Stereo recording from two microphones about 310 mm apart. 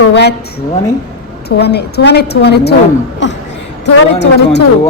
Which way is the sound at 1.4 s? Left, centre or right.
Left.